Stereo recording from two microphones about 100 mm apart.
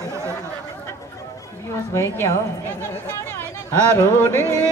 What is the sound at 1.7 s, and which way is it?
Speech, 25° left (ahead or behind).